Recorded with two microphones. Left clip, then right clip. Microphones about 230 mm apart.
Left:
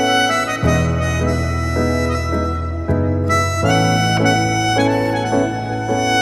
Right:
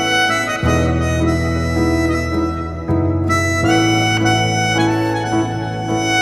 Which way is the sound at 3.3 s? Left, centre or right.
Centre.